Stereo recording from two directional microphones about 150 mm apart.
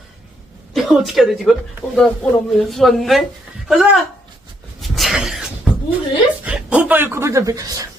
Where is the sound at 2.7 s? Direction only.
Centre (ahead or behind).